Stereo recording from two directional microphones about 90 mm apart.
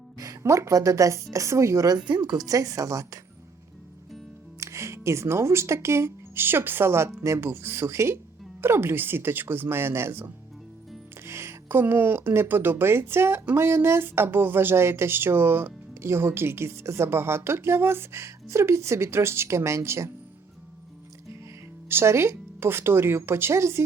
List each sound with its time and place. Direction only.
0.2 s speech: 40° right (ahead or behind)
4.6 s speech: 35° right (ahead or behind)
21.8 s speech: 30° right (ahead or behind)